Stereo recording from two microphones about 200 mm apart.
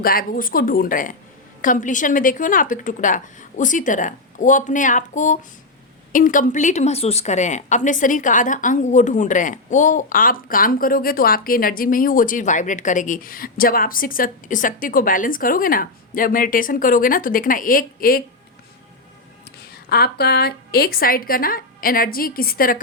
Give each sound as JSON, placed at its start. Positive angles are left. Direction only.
{"t": 0.0, "sound": "a woman's voice", "side_deg": 45}
{"t": 19.7, "sound": "a woman's voice", "side_deg": 50}